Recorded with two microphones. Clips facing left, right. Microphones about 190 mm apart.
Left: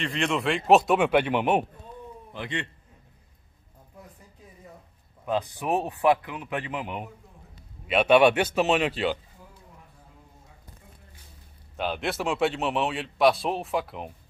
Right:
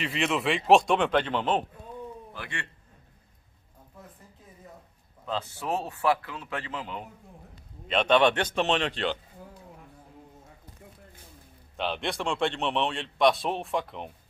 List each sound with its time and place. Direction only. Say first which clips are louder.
0.0 s a man's voice: left 1 dB; 5° right (ahead or behind); by 2.7 s 20° left (ahead or behind)
5.2 s a man's voice: left 5 dB; 15° left (ahead or behind)
11.7 s a man's voice: left 2 dB; 5° left (ahead or behind)